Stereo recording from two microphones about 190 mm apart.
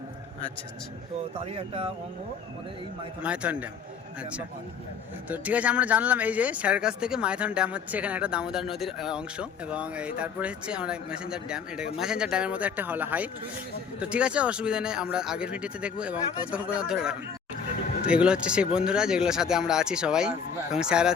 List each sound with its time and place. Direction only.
1.5 s speech: 30° right (ahead or behind)
3.2 s a man's voice: 5° right (ahead or behind)